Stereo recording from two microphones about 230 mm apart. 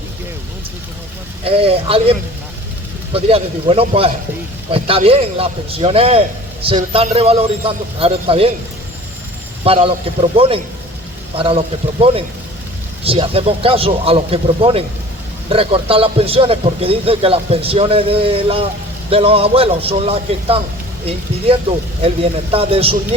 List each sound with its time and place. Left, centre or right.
1.5 s a man's voice: right
9.6 s a man's voice: right
13.1 s a man's voice: right
22.0 s a man's voice: right